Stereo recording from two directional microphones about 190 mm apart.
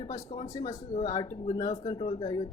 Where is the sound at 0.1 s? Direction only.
20° left (ahead or behind).